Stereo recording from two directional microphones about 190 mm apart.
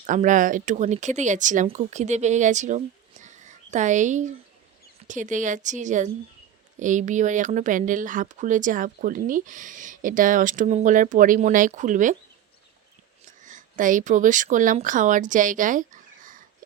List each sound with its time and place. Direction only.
0.0 s speech: 40° right (ahead or behind)
13.2 s speech: 40° right (ahead or behind)